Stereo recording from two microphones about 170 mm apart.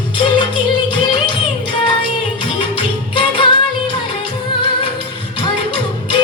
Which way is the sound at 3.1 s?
30° left (ahead or behind).